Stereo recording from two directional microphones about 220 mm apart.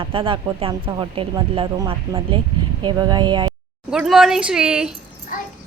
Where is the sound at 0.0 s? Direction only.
25° right (ahead or behind).